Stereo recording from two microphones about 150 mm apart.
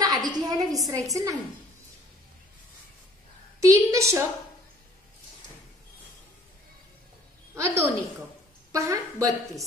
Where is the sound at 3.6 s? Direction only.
20° right (ahead or behind).